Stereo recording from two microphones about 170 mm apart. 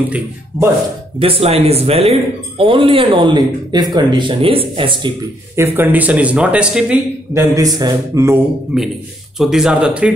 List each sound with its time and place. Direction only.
1.2 s speech: 35° right (ahead or behind)
5.6 s speech: 10° right (ahead or behind)
7.5 s speech: 20° right (ahead or behind)
8.7 s speech: 5° right (ahead or behind)